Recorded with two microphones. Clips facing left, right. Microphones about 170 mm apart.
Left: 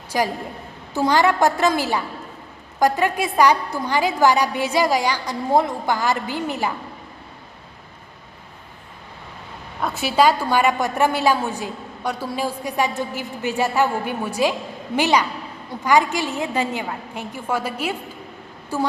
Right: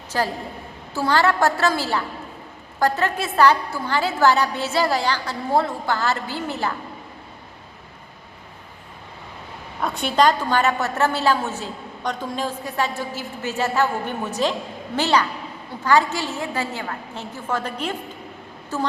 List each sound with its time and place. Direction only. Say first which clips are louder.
0.1 s a woman's voice: left 2 dB; 15° left (ahead or behind)
9.8 s a woman's voice: left 1 dB; 5° left (ahead or behind)